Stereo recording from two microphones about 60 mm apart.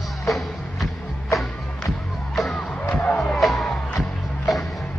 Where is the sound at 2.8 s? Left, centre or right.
Left.